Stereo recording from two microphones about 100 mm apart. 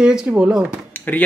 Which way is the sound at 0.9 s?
15° left (ahead or behind).